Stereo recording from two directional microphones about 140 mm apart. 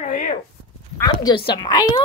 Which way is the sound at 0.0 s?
75° left (ahead or behind).